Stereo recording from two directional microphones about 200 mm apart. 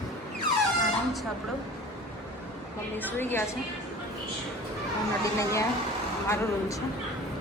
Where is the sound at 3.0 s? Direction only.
10° left (ahead or behind).